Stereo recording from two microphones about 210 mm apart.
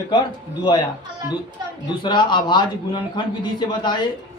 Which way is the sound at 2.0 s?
20° left (ahead or behind).